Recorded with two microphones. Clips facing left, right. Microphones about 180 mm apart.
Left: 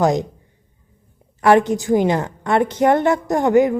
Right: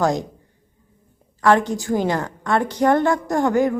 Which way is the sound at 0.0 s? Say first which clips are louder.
Left 3 dB; 20° left (ahead or behind).